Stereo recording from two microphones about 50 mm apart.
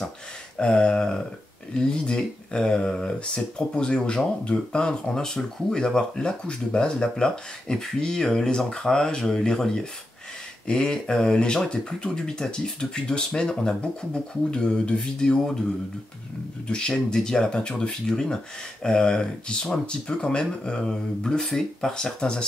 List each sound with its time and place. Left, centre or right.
0.6 s speech: centre
16.6 s speech: centre